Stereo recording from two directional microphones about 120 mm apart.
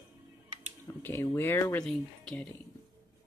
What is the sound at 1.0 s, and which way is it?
Speech, 20° left (ahead or behind).